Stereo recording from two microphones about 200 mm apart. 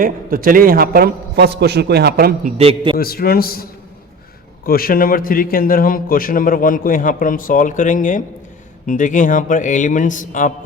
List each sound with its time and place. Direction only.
0.0 s a man's voice: 45° right (ahead or behind)
2.6 s a man's voice: 25° right (ahead or behind)
3.0 s a man's voice: 50° left (ahead or behind)